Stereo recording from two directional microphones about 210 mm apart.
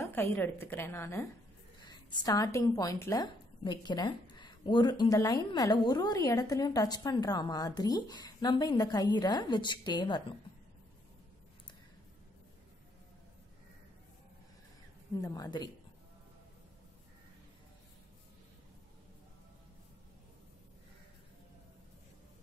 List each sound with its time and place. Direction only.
0.0 s a woman's voice: 10° left (ahead or behind)
15.1 s a woman's voice: 15° left (ahead or behind)